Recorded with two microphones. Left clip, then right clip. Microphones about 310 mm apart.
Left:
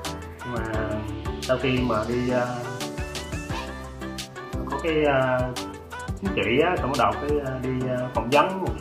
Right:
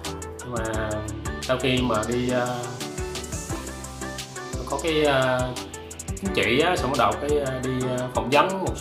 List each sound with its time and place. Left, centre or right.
0.6 s music: centre
1.5 s speech: centre
4.6 s speech: centre